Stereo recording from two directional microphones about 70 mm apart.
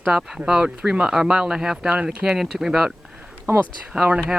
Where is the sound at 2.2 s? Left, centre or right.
Centre.